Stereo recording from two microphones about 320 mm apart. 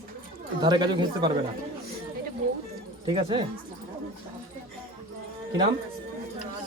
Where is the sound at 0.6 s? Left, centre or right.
Centre.